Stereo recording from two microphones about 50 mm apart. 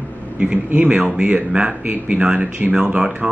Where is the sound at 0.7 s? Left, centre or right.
Right.